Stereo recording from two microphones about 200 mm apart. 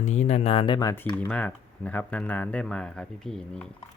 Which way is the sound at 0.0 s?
35° left (ahead or behind).